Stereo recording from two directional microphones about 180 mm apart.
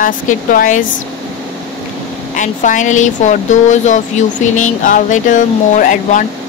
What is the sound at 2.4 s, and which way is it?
Speech, 45° left (ahead or behind).